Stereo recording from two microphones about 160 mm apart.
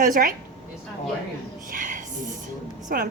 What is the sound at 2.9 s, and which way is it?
Speech, 65° right (ahead or behind).